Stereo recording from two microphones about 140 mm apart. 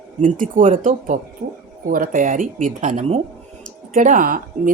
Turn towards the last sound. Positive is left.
turn(degrees=-70)  # may be behind; listen again after turning